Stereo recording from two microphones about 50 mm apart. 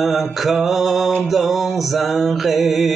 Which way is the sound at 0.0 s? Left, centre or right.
Centre.